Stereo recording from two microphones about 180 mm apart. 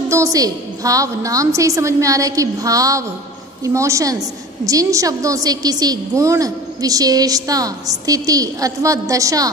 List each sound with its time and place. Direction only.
0.1 s a woman's voice: 20° right (ahead or behind)